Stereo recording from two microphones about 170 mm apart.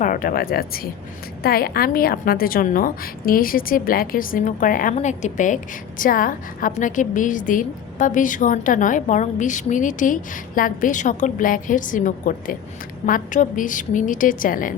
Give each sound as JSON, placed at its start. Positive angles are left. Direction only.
{"t": 0.0, "sound": "a woman's voice", "side_deg": 55}